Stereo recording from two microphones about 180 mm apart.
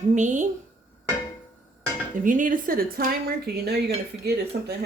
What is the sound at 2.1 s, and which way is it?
Speech, 45° right (ahead or behind).